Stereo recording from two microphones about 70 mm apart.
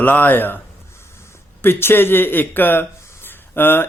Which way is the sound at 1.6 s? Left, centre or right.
Left.